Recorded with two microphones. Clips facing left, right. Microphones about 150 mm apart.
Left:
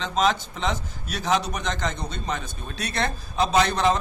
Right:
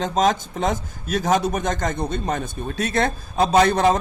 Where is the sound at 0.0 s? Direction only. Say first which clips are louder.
Right 4 dB; 45° right (ahead or behind).